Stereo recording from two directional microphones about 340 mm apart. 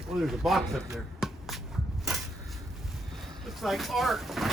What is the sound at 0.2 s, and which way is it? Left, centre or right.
Speech, centre.